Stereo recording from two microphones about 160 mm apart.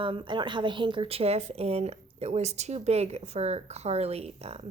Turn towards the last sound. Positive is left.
turn(degrees=-40)  # may be behind; listen again after turning